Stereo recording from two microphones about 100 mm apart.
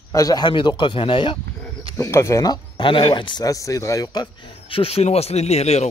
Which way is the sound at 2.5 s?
55° left (ahead or behind).